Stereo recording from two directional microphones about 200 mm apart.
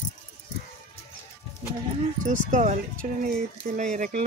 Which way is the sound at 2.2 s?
40° right (ahead or behind).